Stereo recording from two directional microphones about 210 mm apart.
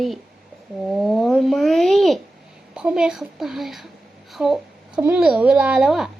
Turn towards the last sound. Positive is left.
turn(degrees=-5)  # may be behind; listen again after turning